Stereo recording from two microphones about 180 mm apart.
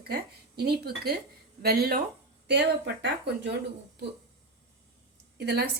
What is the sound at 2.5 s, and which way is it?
Speech, 70° right (ahead or behind).